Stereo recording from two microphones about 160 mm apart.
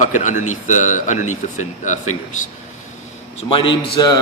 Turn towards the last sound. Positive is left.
turn(degrees=30)  # may be behind; listen again after turning